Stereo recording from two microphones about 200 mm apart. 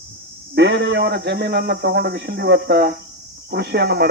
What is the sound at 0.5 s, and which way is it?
A man's voice, 60° right (ahead or behind).